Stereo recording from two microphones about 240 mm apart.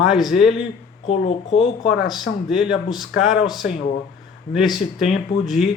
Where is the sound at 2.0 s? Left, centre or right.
Centre.